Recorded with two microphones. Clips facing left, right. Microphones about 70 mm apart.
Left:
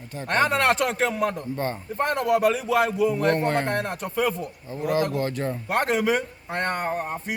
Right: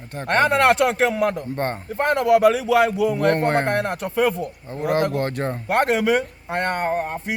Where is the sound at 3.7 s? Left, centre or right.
Right.